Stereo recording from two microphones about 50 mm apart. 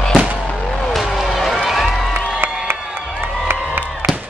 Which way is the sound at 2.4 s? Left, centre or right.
Right.